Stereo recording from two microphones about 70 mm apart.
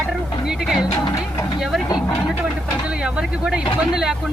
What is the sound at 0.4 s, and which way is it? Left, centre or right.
Speech, centre.